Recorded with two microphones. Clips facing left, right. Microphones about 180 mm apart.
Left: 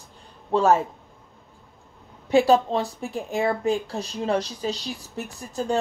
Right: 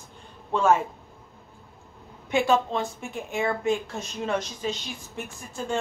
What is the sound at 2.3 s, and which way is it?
Speech, 35° left (ahead or behind).